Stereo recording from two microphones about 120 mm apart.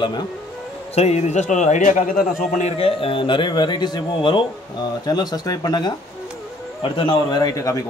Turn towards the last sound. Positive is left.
turn(degrees=30)  # may be behind; listen again after turning